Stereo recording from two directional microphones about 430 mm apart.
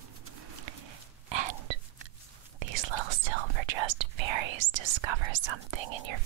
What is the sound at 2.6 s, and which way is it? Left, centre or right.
Whispering, right.